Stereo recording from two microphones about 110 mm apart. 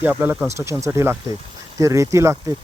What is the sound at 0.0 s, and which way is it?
Speech, 15° right (ahead or behind).